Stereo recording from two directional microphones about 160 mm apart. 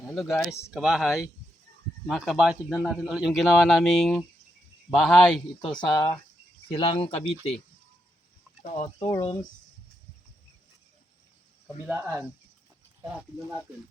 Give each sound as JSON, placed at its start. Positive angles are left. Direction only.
{"t": 0.1, "sound": "a man's voice", "side_deg": 0}
{"t": 5.8, "sound": "speech", "side_deg": 25}
{"t": 8.6, "sound": "speech", "side_deg": 45}
{"t": 11.9, "sound": "speech", "side_deg": -15}